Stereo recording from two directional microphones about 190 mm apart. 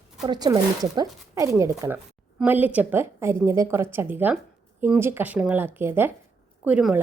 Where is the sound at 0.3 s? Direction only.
20° right (ahead or behind).